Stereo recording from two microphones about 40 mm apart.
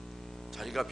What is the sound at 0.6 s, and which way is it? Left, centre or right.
Speech, centre.